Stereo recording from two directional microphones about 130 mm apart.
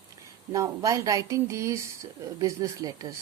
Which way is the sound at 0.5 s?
25° right (ahead or behind).